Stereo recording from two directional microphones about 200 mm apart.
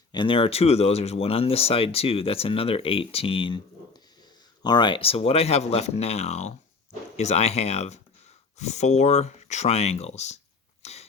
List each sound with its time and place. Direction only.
0.1 s speech: 25° left (ahead or behind)
4.6 s speech: 20° left (ahead or behind)
10.8 s a sound: 30° left (ahead or behind)